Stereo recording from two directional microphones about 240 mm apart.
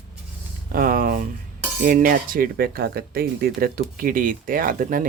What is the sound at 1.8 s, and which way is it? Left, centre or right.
Speech, right.